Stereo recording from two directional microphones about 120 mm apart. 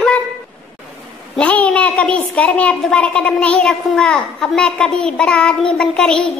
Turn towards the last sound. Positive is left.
turn(degrees=5)  # may be behind; listen again after turning